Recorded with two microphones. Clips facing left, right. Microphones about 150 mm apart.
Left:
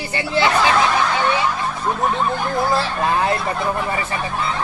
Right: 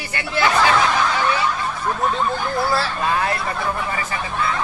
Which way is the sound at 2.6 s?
20° left (ahead or behind).